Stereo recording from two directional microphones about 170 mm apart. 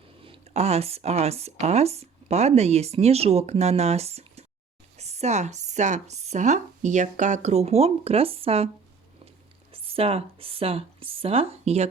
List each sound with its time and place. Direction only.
0.3 s speech: 40° right (ahead or behind)
9.7 s speech: 35° right (ahead or behind)